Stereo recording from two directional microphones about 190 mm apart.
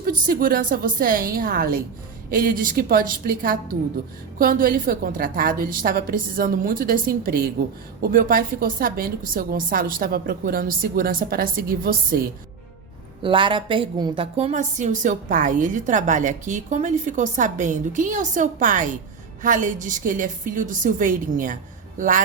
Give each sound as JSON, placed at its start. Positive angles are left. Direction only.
{"t": 0.0, "sound": "a woman's voice", "side_deg": -50}
{"t": 13.2, "sound": "a woman's voice", "side_deg": -25}